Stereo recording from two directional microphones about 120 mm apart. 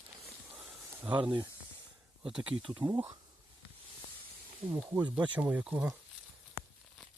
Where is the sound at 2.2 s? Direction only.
10° right (ahead or behind).